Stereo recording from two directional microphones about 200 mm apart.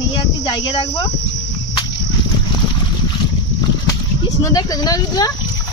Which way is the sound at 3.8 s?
15° left (ahead or behind).